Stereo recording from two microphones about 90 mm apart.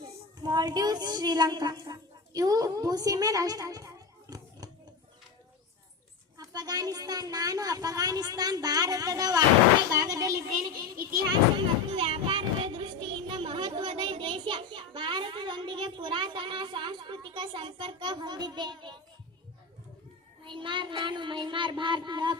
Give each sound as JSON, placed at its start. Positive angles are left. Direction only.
{"t": 0.4, "sound": "speech", "side_deg": -45}
{"t": 1.8, "sound": "a sound", "side_deg": -45}
{"t": 6.3, "sound": "speech", "side_deg": -45}
{"t": 11.5, "sound": "child singing", "side_deg": -90}
{"t": 20.4, "sound": "child singing", "side_deg": -65}